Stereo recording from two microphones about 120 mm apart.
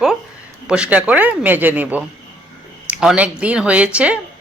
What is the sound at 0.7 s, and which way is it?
Speech, 10° right (ahead or behind).